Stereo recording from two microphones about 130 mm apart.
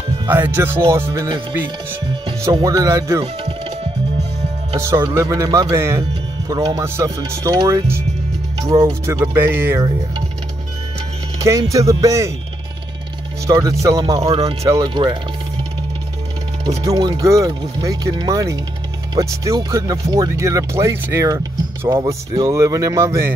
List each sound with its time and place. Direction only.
0.3 s speech: 15° right (ahead or behind)
2.5 s speech: 25° right (ahead or behind)
4.7 s speech: 20° right (ahead or behind)
9.0 s speech: 20° right (ahead or behind)
11.3 s speech: 25° right (ahead or behind)
13.5 s speech: 25° right (ahead or behind)
16.8 s speech: 25° right (ahead or behind)